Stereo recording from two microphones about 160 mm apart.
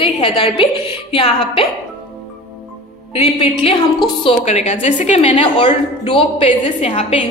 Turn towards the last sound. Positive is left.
turn(degrees=35)  # may be behind; listen again after turning